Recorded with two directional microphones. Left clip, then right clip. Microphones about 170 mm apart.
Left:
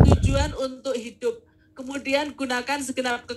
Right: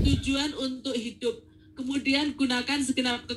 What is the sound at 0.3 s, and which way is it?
A woman's voice, 35° left (ahead or behind).